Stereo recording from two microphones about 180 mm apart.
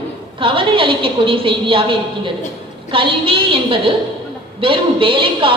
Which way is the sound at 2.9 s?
30° right (ahead or behind).